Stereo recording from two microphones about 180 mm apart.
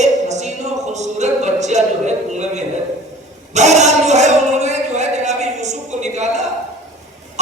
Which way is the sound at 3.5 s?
40° right (ahead or behind).